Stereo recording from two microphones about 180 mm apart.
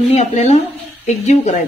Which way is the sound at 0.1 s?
40° left (ahead or behind).